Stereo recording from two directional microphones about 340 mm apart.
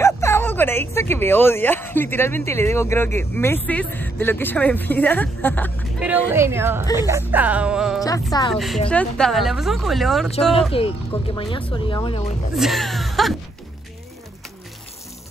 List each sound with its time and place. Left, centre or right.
0.0 s speech: centre
8.0 s speech: centre
8.5 s speech: centre
10.7 s speech: centre
12.5 s speech: centre